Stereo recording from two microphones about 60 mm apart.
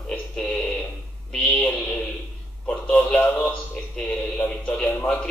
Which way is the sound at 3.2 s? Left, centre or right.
Left.